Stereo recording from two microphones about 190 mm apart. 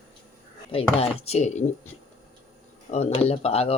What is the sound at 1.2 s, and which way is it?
Speech, 35° left (ahead or behind).